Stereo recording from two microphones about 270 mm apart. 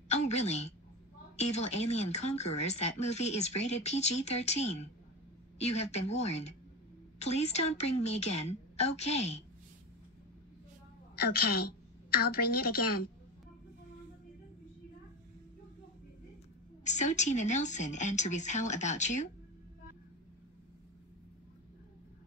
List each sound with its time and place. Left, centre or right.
0.1 s a woman's voice: left
11.1 s a woman's voice: left
16.8 s speech: left